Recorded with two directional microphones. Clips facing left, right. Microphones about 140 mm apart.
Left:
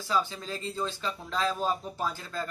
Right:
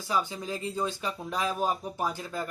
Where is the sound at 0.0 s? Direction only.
15° right (ahead or behind).